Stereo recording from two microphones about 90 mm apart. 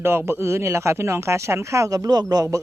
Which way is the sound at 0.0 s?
25° right (ahead or behind).